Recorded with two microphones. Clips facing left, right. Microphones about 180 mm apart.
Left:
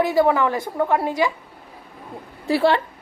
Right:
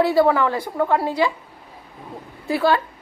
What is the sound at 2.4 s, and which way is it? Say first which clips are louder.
Speech: left 1 dB; 30° left (ahead or behind).